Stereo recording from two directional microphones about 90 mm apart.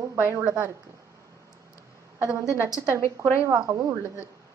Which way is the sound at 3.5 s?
35° right (ahead or behind).